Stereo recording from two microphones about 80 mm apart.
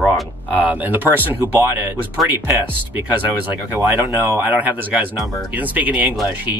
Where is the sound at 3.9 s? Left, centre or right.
Right.